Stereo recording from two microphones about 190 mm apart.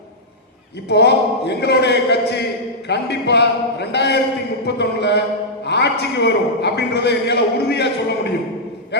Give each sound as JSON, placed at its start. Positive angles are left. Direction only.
{"t": 0.9, "sound": "a man's voice", "side_deg": 60}